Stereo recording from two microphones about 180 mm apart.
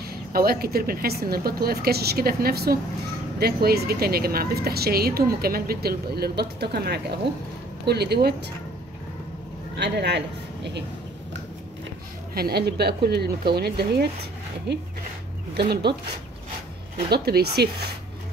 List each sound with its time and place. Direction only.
0.0 s a woman's voice: 55° right (ahead or behind)
9.8 s speech: 70° right (ahead or behind)
12.4 s a woman's voice: 60° right (ahead or behind)
15.5 s speech: 65° right (ahead or behind)
17.1 s a woman's voice: 60° right (ahead or behind)